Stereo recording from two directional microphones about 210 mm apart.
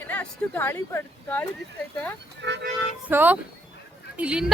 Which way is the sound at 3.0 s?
10° right (ahead or behind).